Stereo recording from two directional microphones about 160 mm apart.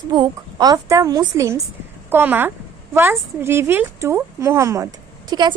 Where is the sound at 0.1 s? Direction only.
25° right (ahead or behind).